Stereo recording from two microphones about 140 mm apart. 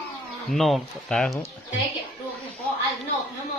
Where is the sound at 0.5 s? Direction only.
Centre (ahead or behind).